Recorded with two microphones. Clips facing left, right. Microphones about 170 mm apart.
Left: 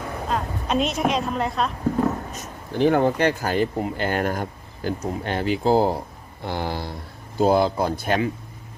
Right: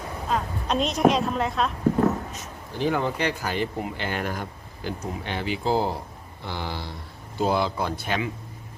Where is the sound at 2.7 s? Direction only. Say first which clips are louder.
Left 6 dB; 55° left (ahead or behind).